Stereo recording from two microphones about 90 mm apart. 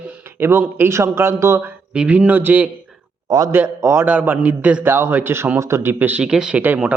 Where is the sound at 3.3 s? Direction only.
45° right (ahead or behind).